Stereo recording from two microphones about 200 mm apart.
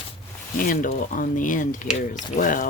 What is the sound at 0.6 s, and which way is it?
Speech, 40° left (ahead or behind).